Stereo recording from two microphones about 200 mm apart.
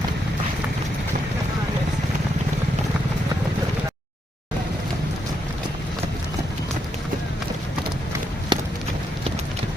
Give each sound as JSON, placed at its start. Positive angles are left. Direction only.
{"t": 8.5, "sound": "run", "side_deg": -20}